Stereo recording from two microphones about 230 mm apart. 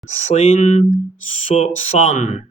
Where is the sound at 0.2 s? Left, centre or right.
Left.